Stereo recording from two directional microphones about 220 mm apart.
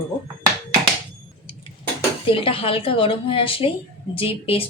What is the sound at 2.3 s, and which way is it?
Speech, 25° left (ahead or behind).